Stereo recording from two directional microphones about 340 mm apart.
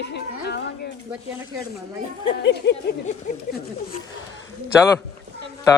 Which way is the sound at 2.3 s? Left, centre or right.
Left.